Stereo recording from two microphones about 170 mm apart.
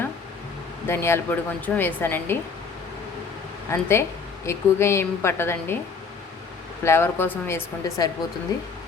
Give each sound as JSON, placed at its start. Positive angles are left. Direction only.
{"t": 0.9, "sound": "speech", "side_deg": 15}
{"t": 3.7, "sound": "speech", "side_deg": 15}
{"t": 6.8, "sound": "speech", "side_deg": 15}